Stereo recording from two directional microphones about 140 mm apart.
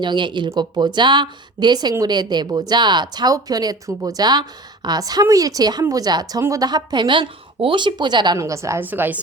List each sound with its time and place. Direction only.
0.0 s speech: 35° right (ahead or behind)
8.4 s speech: 20° right (ahead or behind)